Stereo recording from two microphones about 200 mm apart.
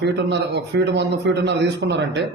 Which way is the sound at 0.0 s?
60° right (ahead or behind).